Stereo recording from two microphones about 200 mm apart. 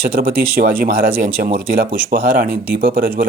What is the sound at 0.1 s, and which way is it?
Speech, 45° right (ahead or behind).